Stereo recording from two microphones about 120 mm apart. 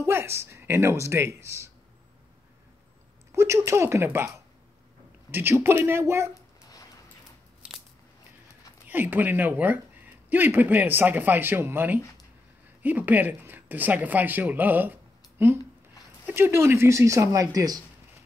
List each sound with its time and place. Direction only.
0.0 s speech: 20° right (ahead or behind)
3.3 s speech: 20° right (ahead or behind)
5.3 s speech: 20° right (ahead or behind)
7.6 s scissors: 10° right (ahead or behind)
8.8 s speech: 15° right (ahead or behind); by 17.8 s 30° right (ahead or behind)